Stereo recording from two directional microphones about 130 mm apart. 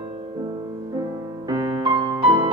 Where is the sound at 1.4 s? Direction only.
30° right (ahead or behind).